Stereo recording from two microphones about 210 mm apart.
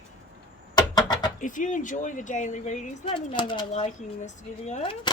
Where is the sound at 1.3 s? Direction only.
40° left (ahead or behind).